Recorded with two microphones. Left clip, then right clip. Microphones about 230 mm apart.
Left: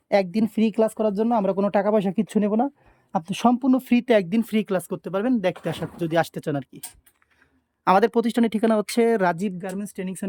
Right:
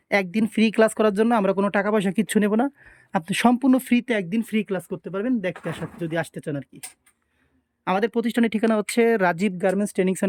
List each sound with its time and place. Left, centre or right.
0.1 s speech: centre
7.9 s speech: centre
9.6 s speech: right